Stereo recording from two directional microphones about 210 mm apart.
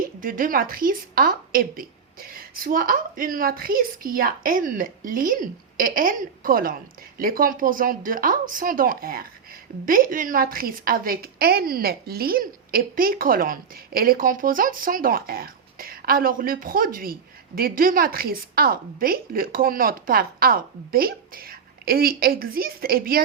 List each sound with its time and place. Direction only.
0.2 s a woman's voice: 40° right (ahead or behind)